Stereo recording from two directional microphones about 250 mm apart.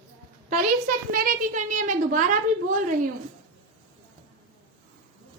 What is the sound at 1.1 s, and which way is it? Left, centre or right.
A woman's voice, right.